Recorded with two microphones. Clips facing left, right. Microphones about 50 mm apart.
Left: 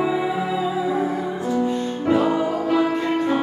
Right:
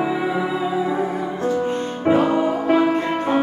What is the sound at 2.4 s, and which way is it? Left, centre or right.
Music, right.